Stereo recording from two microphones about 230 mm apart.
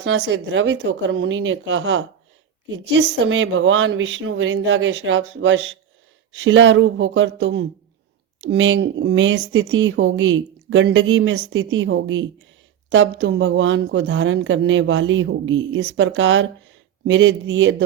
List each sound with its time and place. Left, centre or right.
0.0 s a woman's voice: right